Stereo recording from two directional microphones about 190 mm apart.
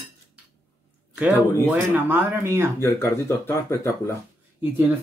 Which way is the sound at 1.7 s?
10° right (ahead or behind).